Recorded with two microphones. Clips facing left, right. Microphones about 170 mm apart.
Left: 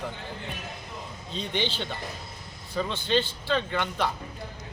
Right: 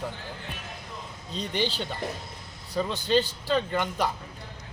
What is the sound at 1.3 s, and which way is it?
Speech, 40° right (ahead or behind).